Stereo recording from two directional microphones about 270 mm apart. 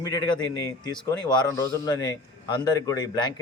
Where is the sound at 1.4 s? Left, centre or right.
Centre.